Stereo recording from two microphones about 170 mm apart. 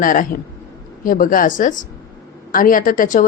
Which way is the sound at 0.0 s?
50° left (ahead or behind).